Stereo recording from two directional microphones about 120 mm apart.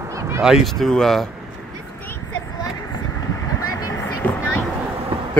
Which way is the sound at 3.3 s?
25° left (ahead or behind).